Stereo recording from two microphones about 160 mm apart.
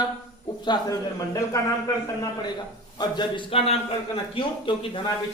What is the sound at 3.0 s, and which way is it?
A man's voice, 30° left (ahead or behind).